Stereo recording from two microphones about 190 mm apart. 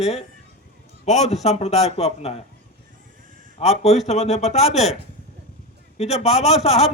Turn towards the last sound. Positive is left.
turn(degrees=35)  # may be behind; listen again after turning